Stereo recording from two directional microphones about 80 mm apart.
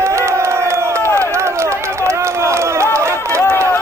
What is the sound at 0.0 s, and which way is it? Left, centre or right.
Run, right.